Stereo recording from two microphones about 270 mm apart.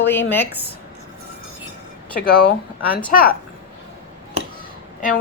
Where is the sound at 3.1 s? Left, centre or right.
Left.